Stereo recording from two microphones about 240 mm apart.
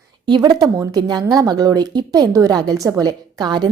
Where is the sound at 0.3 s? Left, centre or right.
Centre.